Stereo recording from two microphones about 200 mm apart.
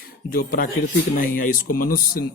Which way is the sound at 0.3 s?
45° left (ahead or behind).